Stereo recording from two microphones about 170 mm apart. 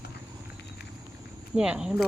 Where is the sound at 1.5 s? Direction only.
5° right (ahead or behind).